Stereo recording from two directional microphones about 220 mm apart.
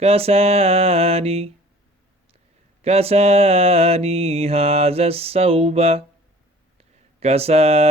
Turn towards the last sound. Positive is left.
turn(degrees=-30)  # may be behind; listen again after turning